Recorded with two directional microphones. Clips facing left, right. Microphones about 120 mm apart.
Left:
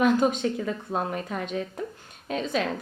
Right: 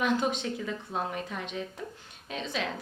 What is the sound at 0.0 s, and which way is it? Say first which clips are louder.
A woman's voice: left 6 dB; 45° left (ahead or behind).